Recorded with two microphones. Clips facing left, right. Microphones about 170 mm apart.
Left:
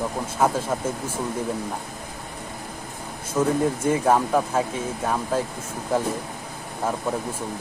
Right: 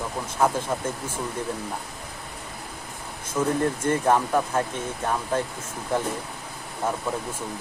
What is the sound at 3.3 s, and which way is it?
Speech, 10° left (ahead or behind).